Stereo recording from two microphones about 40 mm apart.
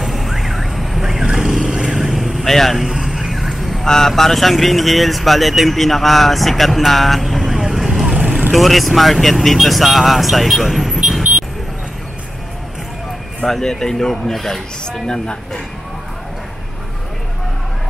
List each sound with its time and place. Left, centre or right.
0.0 s car alarm: centre
1.2 s vehicle: centre
2.0 s vehicle: centre
2.4 s speech: centre
2.7 s vehicle: centre
3.8 s speech: centre
13.5 s speech: centre
15.0 s speech: centre